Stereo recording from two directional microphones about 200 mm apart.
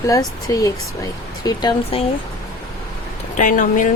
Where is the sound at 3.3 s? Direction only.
40° left (ahead or behind).